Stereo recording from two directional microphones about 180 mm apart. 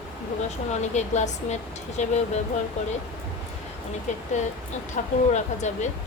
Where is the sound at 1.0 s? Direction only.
40° left (ahead or behind).